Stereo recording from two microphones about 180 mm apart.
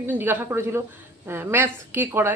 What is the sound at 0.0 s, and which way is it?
A woman's voice, 10° right (ahead or behind).